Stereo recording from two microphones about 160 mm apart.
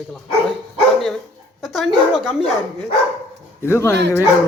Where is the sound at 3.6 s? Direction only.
15° left (ahead or behind).